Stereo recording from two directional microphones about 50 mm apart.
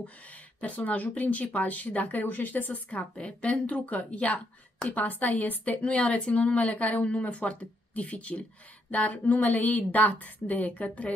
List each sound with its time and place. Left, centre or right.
0.6 s speech: left